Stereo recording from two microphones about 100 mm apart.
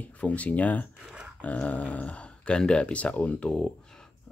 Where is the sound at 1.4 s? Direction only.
15° left (ahead or behind).